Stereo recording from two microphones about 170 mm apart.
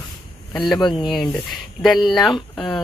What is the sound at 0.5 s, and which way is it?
Speech, centre (ahead or behind).